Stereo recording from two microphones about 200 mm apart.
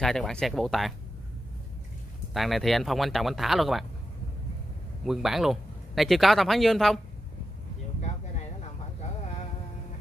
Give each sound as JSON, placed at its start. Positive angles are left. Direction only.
{"t": 0.0, "sound": "speech", "side_deg": 0}
{"t": 2.3, "sound": "speech", "side_deg": 0}
{"t": 5.0, "sound": "speech", "side_deg": 0}
{"t": 8.0, "sound": "a sound", "side_deg": 30}